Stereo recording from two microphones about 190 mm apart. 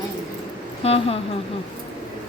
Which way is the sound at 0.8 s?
30° left (ahead or behind).